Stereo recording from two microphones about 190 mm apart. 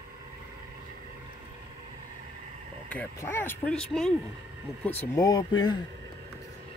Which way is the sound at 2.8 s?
10° left (ahead or behind).